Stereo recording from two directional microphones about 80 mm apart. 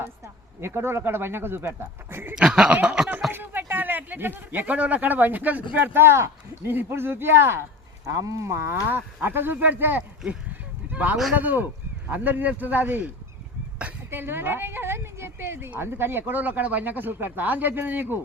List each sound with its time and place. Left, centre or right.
0.6 s a woman's voice: right
2.3 s chuckle: centre
3.3 s a woman's voice: right
8.0 s a woman's voice: right
14.1 s a woman's voice: right